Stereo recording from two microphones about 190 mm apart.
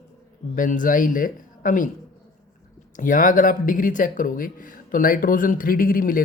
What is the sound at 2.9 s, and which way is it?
Speech, 45° left (ahead or behind).